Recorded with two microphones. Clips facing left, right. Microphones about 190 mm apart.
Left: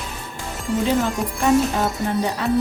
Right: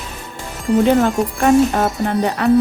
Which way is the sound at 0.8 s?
60° right (ahead or behind).